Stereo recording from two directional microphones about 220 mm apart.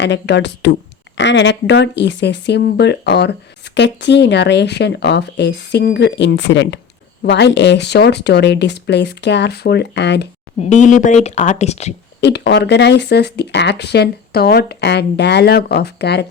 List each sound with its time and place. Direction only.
0.0 s speech: 50° left (ahead or behind)
10.6 s speech: 35° left (ahead or behind)
12.2 s speech: 50° left (ahead or behind)